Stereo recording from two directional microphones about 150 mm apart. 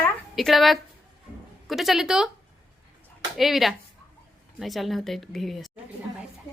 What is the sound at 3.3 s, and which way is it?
Speech, centre (ahead or behind).